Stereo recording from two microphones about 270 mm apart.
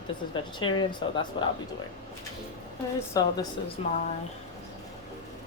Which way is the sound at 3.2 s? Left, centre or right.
Centre.